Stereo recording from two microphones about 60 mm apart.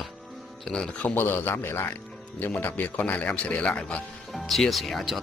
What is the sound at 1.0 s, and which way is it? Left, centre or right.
A man's voice, left.